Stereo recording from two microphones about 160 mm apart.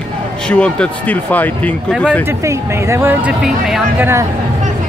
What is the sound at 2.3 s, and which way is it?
Speech, 15° right (ahead or behind).